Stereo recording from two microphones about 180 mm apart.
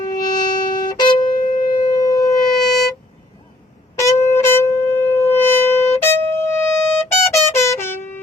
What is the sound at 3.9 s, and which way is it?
Wind instrument, 15° left (ahead or behind).